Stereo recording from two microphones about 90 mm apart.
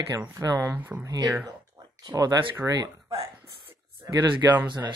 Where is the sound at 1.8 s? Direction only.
35° right (ahead or behind).